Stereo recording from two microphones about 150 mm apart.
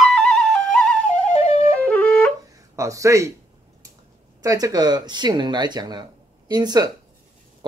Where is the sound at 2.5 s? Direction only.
20° right (ahead or behind).